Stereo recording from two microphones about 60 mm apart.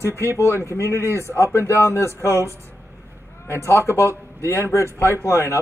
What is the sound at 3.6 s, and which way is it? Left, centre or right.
Speech, left.